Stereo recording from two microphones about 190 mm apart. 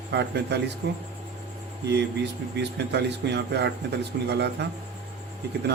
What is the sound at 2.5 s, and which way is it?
A man's voice, 65° right (ahead or behind).